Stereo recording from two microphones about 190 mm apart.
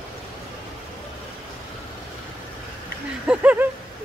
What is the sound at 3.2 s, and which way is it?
Speech, 5° right (ahead or behind).